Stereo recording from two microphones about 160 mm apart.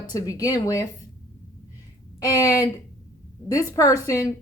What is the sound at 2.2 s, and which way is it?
A woman's voice, 20° left (ahead or behind).